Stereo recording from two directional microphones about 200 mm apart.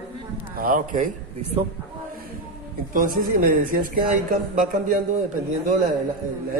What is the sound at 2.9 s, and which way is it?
A man's voice, 45° right (ahead or behind).